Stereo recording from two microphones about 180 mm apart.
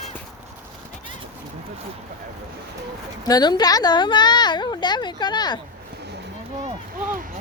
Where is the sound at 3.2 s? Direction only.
20° left (ahead or behind).